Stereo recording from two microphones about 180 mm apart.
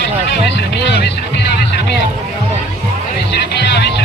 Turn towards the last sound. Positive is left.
turn(degrees=70)  # may be behind; listen again after turning